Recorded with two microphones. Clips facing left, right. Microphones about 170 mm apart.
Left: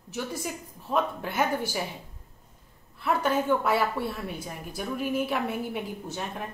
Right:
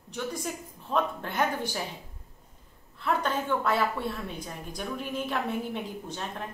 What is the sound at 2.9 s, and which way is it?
A woman's voice, 10° left (ahead or behind).